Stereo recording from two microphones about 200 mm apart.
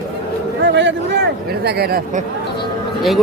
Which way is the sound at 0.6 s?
60° right (ahead or behind).